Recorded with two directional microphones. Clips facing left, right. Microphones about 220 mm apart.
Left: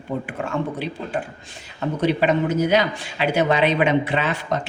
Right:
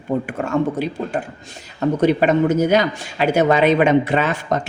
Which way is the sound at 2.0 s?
45° right (ahead or behind).